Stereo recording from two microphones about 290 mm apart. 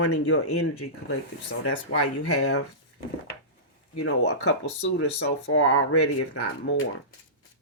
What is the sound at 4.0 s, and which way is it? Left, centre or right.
Speech, left.